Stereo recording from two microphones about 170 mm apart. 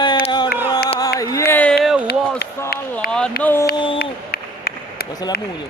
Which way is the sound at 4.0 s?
65° left (ahead or behind).